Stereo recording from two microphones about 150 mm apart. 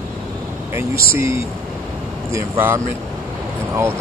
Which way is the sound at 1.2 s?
20° right (ahead or behind).